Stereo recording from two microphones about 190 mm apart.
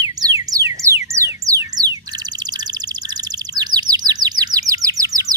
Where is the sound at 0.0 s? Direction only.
20° right (ahead or behind).